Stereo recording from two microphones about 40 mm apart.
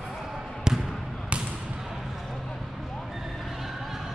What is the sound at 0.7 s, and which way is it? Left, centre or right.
Basketball bounce, centre.